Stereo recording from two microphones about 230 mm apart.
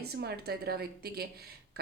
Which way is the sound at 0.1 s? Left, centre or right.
Right.